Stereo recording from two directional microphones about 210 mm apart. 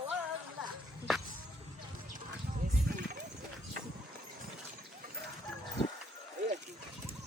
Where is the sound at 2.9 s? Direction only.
40° right (ahead or behind).